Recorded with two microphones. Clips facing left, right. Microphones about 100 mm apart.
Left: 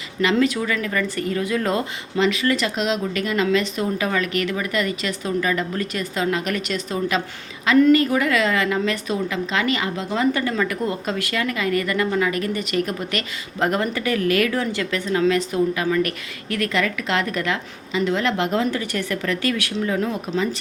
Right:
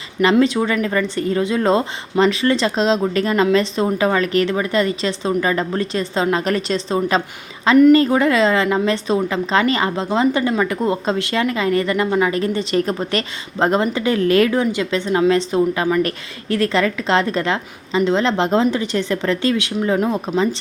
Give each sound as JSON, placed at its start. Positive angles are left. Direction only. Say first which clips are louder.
{"t": 0.2, "sound": "a woman's voice", "louder": "right 5 dB", "side_deg": -30}